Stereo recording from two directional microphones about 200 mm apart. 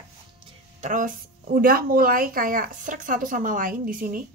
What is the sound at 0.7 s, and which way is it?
Speech, 40° right (ahead or behind).